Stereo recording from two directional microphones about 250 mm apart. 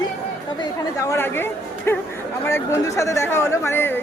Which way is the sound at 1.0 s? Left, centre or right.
Centre.